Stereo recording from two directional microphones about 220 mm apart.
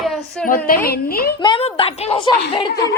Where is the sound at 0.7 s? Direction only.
45° left (ahead or behind).